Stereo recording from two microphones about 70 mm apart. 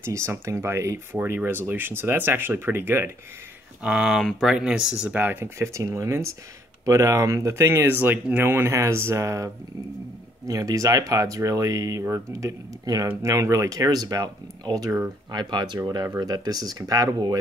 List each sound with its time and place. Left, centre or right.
0.0 s speech: right
3.8 s speech: centre
4.2 s speech: centre
4.5 s speech: centre
5.1 s speech: right
7.9 s speech: right
12.8 s speech: right
13.2 s speech: right
15.3 s speech: right
16.2 s speech: right